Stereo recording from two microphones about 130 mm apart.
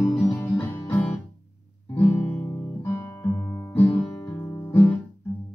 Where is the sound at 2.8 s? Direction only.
20° left (ahead or behind).